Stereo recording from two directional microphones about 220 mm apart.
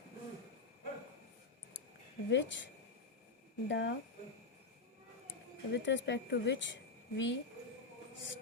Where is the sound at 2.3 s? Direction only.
55° left (ahead or behind).